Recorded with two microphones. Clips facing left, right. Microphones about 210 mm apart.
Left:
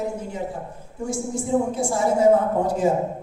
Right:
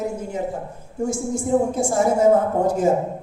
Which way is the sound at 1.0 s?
45° right (ahead or behind).